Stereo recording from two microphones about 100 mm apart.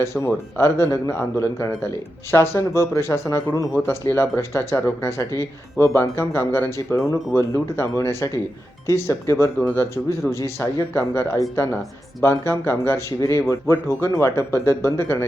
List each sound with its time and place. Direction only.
0.0 s speech: 30° left (ahead or behind)